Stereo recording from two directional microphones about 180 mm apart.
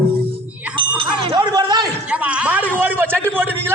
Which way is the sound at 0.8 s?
30° right (ahead or behind).